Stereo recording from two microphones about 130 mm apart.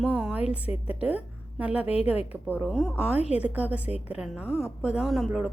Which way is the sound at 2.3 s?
15° right (ahead or behind).